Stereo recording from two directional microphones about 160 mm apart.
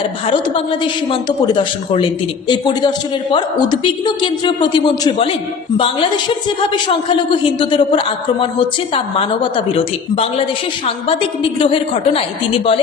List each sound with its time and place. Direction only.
0.3 s a woman's voice: 35° left (ahead or behind)
11.6 s a woman's voice: 35° left (ahead or behind)